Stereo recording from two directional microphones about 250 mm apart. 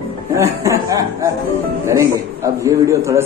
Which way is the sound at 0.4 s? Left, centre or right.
Centre.